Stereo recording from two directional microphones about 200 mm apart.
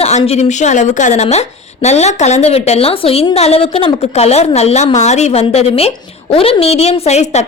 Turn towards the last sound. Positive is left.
turn(degrees=35)  # may be behind; listen again after turning